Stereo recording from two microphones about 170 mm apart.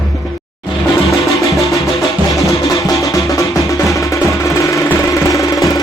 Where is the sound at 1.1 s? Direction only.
20° left (ahead or behind).